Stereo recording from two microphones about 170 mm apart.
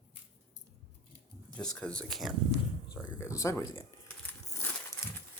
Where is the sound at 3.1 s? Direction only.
15° left (ahead or behind).